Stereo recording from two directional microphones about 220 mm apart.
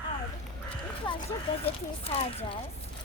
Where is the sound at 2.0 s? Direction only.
25° left (ahead or behind).